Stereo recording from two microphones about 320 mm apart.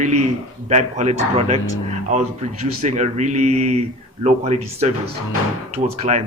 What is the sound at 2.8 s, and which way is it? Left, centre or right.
A man's voice, right.